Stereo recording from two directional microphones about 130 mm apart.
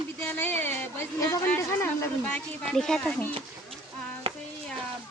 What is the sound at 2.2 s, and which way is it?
Speech, 5° left (ahead or behind).